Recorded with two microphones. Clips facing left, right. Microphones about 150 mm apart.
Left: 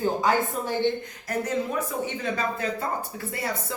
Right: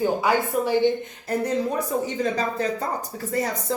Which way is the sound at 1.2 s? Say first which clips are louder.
Right 4 dB; 35° right (ahead or behind).